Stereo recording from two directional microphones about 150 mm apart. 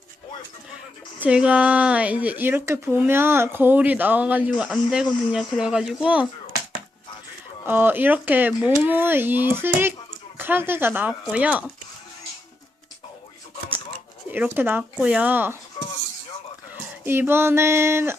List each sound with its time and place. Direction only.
1.2 s speech: 5° right (ahead or behind)
7.6 s speech: 15° right (ahead or behind)
14.3 s speech: 10° right (ahead or behind)
17.1 s speech: 15° right (ahead or behind)